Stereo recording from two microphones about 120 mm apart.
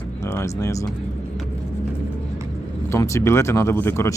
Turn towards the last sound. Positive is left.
turn(degrees=20)  # may be behind; listen again after turning